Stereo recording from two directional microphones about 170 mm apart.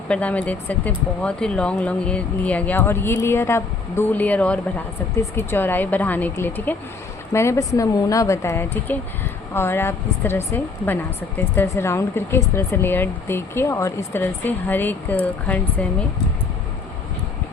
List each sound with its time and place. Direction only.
0.1 s a woman's voice: 10° left (ahead or behind)